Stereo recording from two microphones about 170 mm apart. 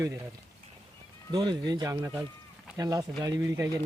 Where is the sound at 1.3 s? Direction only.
25° right (ahead or behind).